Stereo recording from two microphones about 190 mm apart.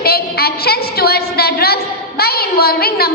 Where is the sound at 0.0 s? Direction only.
55° left (ahead or behind).